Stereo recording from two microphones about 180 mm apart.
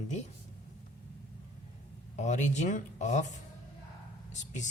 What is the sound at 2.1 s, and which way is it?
Speech, 40° left (ahead or behind).